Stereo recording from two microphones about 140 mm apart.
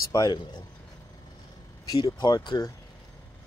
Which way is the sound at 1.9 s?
30° left (ahead or behind).